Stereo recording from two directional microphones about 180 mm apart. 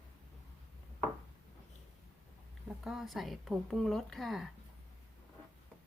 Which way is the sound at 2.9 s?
Centre (ahead or behind).